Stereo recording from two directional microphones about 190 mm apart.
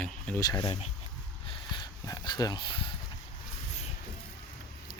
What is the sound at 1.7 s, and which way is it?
Speech, 20° left (ahead or behind).